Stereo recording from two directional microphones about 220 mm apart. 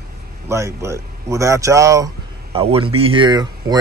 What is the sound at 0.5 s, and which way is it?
Speech, 10° right (ahead or behind).